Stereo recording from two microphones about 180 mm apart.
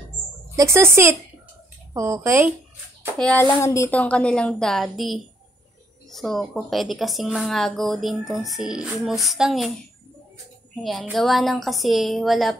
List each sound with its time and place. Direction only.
0.6 s speech: 15° right (ahead or behind)
2.0 s speech: 15° right (ahead or behind)
3.2 s speech: 5° left (ahead or behind)
3.5 s speech: 15° left (ahead or behind); by 9.7 s centre (ahead or behind)
10.8 s speech: centre (ahead or behind)